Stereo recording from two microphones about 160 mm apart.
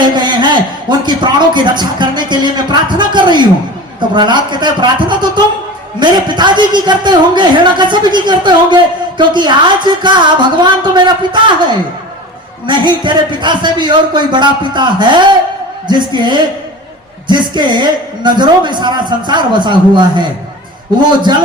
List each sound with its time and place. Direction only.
0.0 s a man's voice: 30° right (ahead or behind)